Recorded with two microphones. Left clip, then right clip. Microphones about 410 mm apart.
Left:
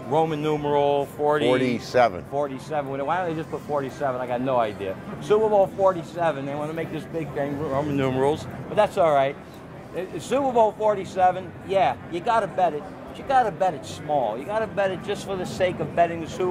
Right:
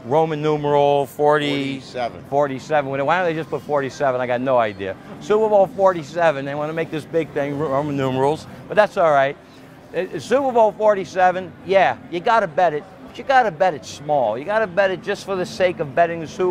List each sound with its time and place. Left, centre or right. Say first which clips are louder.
0.1 s speech: right 4 dB; right
1.9 s speech: left 10 dB; left
2.3 s speech: right 8 dB; right
8.0 s speech: right 2 dB; right
8.7 s speech: right 4 dB; right
9.9 s speech: right 6 dB; right